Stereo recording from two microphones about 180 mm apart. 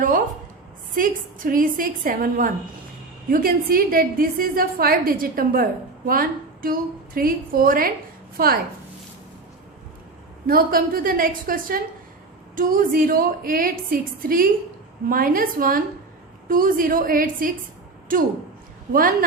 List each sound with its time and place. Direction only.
0.9 s a woman's voice: 50° right (ahead or behind)
10.4 s a woman's voice: 55° right (ahead or behind)